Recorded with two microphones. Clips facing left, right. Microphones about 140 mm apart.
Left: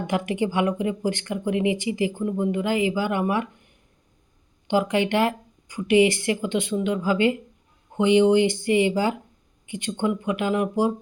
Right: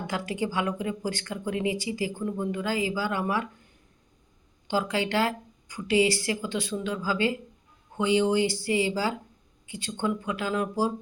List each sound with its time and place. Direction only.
0.1 s speech: 20° left (ahead or behind)
4.7 s speech: 20° left (ahead or behind)